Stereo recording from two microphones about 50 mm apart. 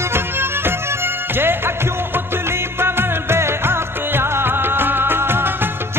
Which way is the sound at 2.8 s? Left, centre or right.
Right.